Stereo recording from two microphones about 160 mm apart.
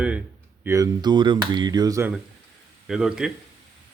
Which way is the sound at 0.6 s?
20° right (ahead or behind).